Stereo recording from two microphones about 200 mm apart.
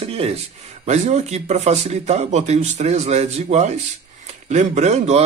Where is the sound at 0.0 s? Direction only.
30° right (ahead or behind).